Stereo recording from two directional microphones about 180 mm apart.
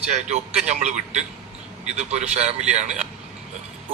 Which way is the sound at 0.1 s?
40° right (ahead or behind).